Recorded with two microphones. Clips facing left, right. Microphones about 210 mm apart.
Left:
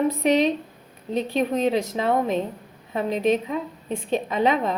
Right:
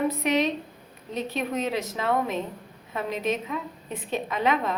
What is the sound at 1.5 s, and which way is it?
A woman's voice, 30° left (ahead or behind).